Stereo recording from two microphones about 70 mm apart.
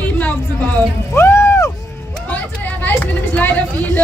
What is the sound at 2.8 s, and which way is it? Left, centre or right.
Vehicle, left.